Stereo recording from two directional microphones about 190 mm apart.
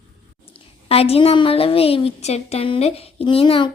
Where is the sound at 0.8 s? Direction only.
30° left (ahead or behind).